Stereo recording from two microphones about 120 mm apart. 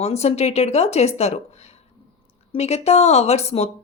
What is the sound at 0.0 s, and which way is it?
Speech, 65° left (ahead or behind).